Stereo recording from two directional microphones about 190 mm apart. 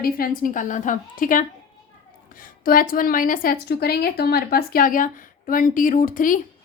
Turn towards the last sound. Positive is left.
turn(degrees=45)  # may be behind; listen again after turning